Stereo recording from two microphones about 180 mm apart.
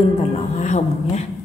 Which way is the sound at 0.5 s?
40° left (ahead or behind).